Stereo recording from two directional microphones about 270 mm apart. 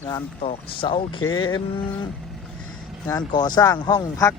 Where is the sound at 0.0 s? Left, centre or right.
Centre.